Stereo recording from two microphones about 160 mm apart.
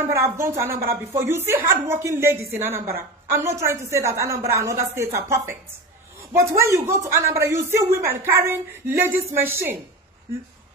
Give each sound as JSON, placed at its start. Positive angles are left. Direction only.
{"t": 0.0, "sound": "speech", "side_deg": -15}